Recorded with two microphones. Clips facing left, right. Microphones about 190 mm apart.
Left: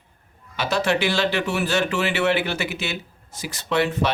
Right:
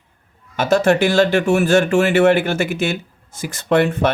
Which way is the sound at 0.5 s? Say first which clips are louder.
Right 7 dB; 45° right (ahead or behind).